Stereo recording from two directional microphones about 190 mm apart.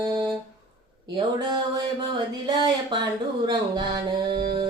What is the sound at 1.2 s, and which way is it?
Speech, 25° right (ahead or behind).